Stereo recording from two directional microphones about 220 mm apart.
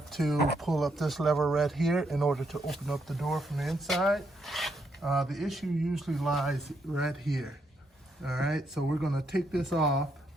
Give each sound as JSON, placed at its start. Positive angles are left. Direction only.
{"t": 0.1, "sound": "speech", "side_deg": 0}
{"t": 0.3, "sound": "speech", "side_deg": 45}
{"t": 0.6, "sound": "speech", "side_deg": 0}